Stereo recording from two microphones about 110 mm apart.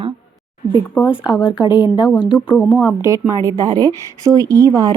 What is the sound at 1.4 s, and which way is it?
Speech, 45° left (ahead or behind).